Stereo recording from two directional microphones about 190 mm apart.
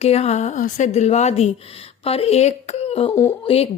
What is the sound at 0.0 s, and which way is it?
Speech, 35° left (ahead or behind).